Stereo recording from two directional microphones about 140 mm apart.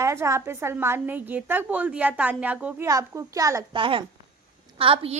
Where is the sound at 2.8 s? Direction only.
20° right (ahead or behind).